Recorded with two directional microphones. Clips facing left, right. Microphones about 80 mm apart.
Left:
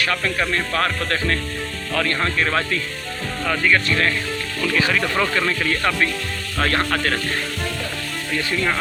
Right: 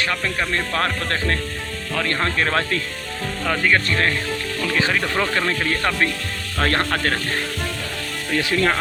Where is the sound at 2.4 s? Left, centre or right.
Right.